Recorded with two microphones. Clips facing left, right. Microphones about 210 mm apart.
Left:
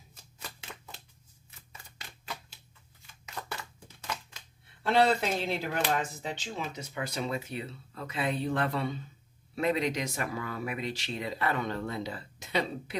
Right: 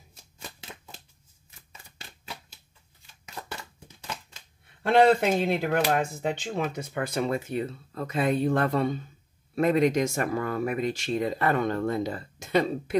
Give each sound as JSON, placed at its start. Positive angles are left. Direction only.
{"t": 4.8, "sound": "speech", "side_deg": -50}